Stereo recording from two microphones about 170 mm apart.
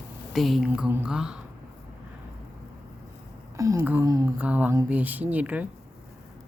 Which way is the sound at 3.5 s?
15° right (ahead or behind).